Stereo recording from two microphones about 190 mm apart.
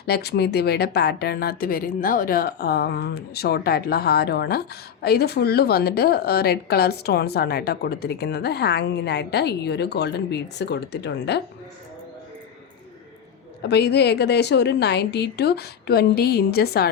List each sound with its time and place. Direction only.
0.0 s speech: 60° left (ahead or behind)
13.6 s speech: 60° left (ahead or behind)